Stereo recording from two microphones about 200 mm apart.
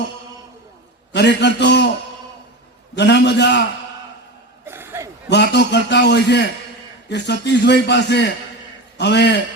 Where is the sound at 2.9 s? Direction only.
60° left (ahead or behind).